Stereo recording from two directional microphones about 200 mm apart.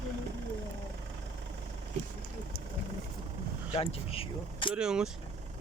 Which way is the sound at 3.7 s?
30° left (ahead or behind).